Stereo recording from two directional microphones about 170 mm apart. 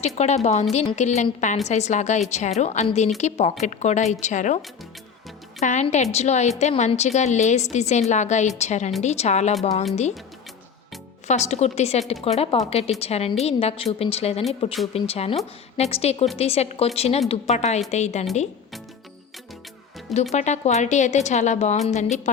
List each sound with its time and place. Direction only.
0.0 s a woman's voice: 40° left (ahead or behind)
11.3 s a woman's voice: 40° left (ahead or behind)
20.3 s a woman's voice: 45° left (ahead or behind)